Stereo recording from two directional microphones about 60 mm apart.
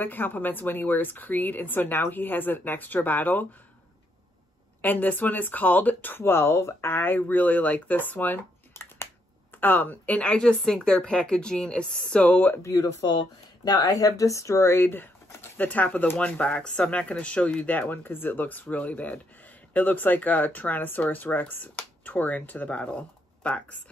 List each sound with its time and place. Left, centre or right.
0.0 s speech: left
4.8 s a woman's voice: left
12.6 s speech: left
13.7 s speech: left
15.5 s speech: left
18.0 s speech: left